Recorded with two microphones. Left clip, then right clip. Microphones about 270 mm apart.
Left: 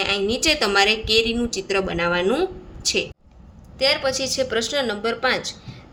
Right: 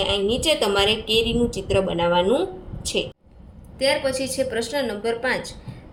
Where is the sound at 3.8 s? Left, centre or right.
Left.